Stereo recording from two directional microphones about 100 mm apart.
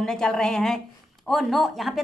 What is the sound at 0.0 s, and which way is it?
A woman's voice, 5° left (ahead or behind).